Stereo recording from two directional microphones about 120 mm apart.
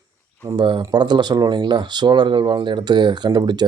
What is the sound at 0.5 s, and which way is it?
Speech, 40° right (ahead or behind).